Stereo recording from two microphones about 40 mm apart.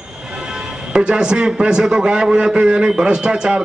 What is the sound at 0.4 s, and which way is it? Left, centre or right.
Music, centre.